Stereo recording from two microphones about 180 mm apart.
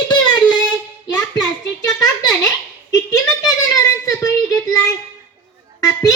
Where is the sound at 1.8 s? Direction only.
20° left (ahead or behind).